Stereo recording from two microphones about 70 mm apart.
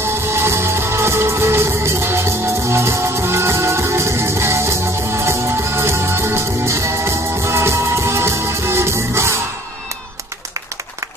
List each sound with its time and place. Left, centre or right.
0.0 s music: right